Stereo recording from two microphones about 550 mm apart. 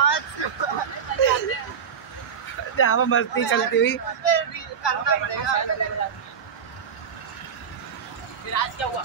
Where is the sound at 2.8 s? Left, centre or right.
Left.